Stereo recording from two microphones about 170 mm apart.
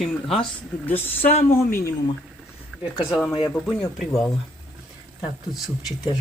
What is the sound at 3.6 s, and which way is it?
Speech, centre (ahead or behind).